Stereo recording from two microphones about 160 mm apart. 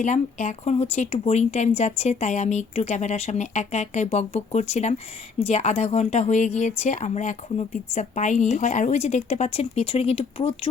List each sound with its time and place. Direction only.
0.0 s speech: 50° left (ahead or behind)